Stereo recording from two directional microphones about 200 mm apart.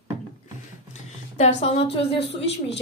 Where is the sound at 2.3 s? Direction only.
60° left (ahead or behind).